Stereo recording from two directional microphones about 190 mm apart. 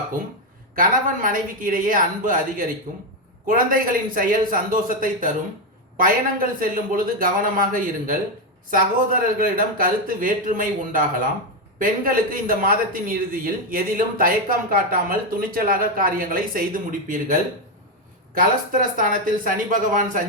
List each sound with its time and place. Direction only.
0.8 s speech: 45° right (ahead or behind)
18.3 s speech: 45° right (ahead or behind)